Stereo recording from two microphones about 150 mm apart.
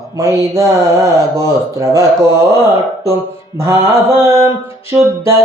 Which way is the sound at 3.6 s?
15° right (ahead or behind).